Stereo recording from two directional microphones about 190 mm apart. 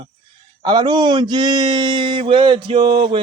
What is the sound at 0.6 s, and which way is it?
A man's voice, 25° right (ahead or behind).